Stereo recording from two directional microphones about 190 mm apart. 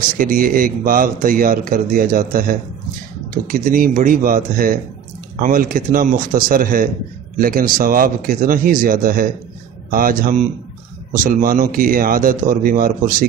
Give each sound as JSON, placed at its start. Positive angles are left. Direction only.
{"t": 0.2, "sound": "a man's voice", "side_deg": -45}